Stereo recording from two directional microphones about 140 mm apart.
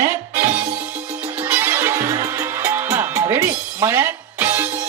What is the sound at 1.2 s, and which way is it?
Music, 10° right (ahead or behind).